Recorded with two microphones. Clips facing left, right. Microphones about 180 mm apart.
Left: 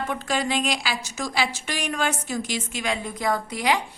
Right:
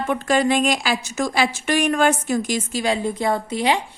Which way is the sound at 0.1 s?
55° right (ahead or behind).